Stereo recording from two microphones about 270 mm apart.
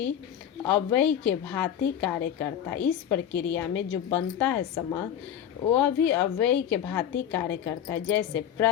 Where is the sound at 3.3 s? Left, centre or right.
Left.